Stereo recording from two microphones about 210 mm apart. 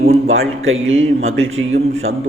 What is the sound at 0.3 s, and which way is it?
A man's voice, 70° right (ahead or behind).